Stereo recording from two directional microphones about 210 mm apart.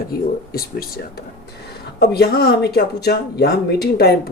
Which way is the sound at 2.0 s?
50° left (ahead or behind).